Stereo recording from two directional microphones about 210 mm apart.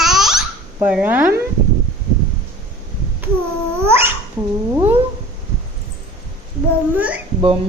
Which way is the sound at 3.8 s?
10° right (ahead or behind).